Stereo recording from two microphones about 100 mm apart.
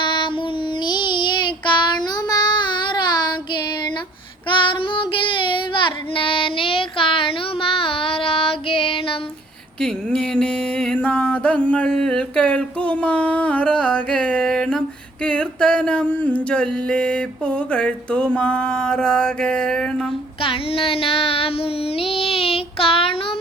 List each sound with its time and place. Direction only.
0.0 s child singing: 50° left (ahead or behind)
9.8 s music: 10° left (ahead or behind)
20.4 s child singing: 65° left (ahead or behind)